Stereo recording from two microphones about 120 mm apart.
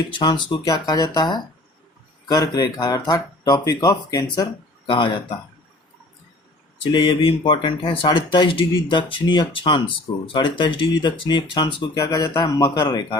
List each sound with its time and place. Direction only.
0.2 s speech: 35° left (ahead or behind)
4.9 s speech: 40° left (ahead or behind)
6.9 s speech: 45° left (ahead or behind)